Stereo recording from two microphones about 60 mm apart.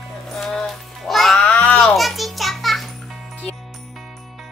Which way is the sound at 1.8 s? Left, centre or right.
Centre.